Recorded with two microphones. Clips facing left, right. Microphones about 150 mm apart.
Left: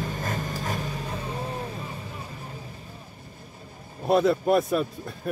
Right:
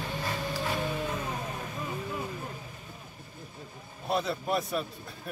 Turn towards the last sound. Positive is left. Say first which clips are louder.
# left 8 dB
turn(degrees=50)  # may be behind; listen again after turning